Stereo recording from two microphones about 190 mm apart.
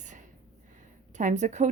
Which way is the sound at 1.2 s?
40° right (ahead or behind).